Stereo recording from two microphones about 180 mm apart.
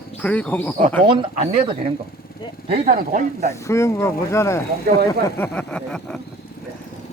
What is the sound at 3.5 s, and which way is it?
Speech, 15° left (ahead or behind).